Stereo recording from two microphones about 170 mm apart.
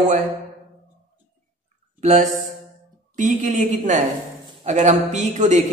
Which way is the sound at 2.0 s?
45° right (ahead or behind).